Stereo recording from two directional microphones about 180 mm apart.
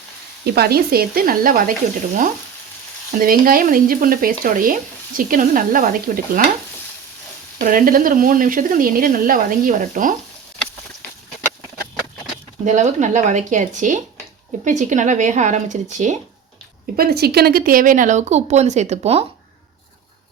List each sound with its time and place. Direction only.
0.4 s speech: 60° right (ahead or behind)
3.2 s speech: 50° right (ahead or behind)
7.6 s speech: 50° right (ahead or behind)
12.6 s speech: 40° right (ahead or behind)
17.0 s speech: 60° right (ahead or behind); by 19.2 s 35° right (ahead or behind)